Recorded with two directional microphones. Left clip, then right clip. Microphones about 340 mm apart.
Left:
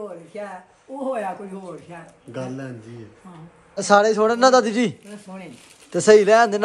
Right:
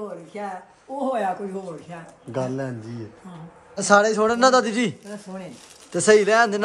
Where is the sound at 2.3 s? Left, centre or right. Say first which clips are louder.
Right 5 dB; right.